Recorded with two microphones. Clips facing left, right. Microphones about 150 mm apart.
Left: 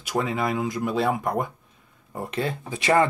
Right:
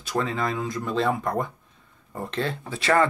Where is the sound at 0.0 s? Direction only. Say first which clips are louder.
Left 1 dB; 15° left (ahead or behind).